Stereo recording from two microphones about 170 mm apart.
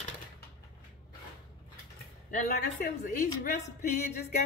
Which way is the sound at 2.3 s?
55° left (ahead or behind).